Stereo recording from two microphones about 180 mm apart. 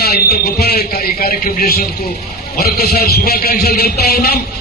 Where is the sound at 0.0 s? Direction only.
60° left (ahead or behind).